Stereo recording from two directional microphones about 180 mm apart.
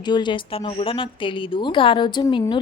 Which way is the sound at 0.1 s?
25° left (ahead or behind).